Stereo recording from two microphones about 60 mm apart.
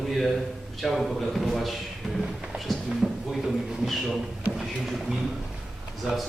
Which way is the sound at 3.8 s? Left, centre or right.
Centre.